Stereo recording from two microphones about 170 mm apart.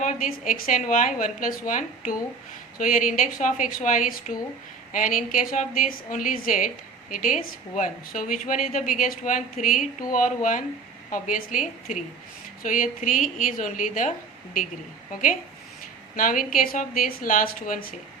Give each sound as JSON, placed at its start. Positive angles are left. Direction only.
{"t": 0.0, "sound": "speech", "side_deg": 50}
{"t": 16.1, "sound": "a woman's voice", "side_deg": 55}